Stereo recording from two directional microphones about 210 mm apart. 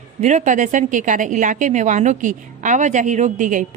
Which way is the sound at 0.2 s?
35° right (ahead or behind).